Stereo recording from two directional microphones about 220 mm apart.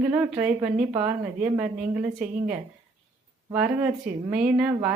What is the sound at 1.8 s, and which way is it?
Speech, 40° right (ahead or behind).